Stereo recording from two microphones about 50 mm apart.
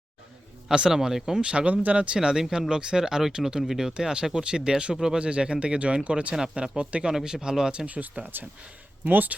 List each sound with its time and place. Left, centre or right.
0.7 s speech: centre
1.4 s speech: right
2.1 s speech: centre
7.2 s speech: centre
7.9 s speech: right